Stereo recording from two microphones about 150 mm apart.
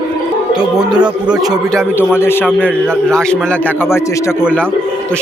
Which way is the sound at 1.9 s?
15° left (ahead or behind).